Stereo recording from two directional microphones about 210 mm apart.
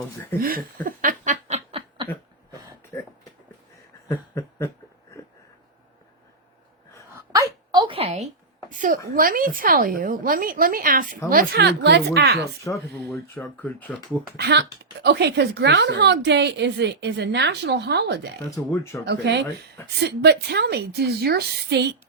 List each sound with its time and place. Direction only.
0.3 s snicker: 40° right (ahead or behind)
2.9 s a sound: 15° left (ahead or behind)
4.1 s snicker: 15° left (ahead or behind)
7.1 s a sound: 15° right (ahead or behind); by 9.0 s 40° right (ahead or behind)
9.0 s a woman's voice: 40° right (ahead or behind)
12.6 s speech: 15° left (ahead or behind)
14.3 s a woman's voice: 55° right (ahead or behind)
18.5 s speech: 15° left (ahead or behind)
19.0 s a woman's voice: 55° right (ahead or behind)